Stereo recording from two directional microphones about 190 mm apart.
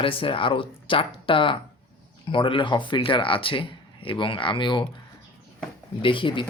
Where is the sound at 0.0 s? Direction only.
30° left (ahead or behind).